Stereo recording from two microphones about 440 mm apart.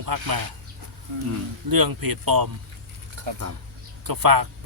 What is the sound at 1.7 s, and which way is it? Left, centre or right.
Speech, right.